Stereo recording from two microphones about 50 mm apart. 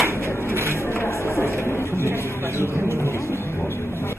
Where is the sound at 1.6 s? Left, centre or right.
Left.